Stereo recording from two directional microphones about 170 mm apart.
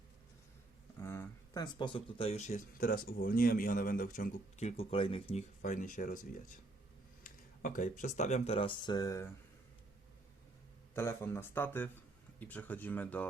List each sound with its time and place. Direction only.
1.0 s speech: 15° left (ahead or behind); by 4.6 s 55° left (ahead or behind)
4.6 s speech: 35° left (ahead or behind); by 6.2 s 50° left (ahead or behind)
7.3 s speech: 50° left (ahead or behind); by 9.3 s 20° left (ahead or behind)
10.9 s speech: 15° left (ahead or behind)